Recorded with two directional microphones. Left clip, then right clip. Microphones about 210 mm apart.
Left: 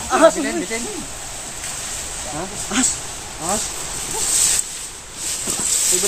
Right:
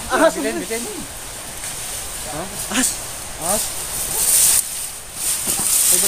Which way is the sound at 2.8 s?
35° right (ahead or behind).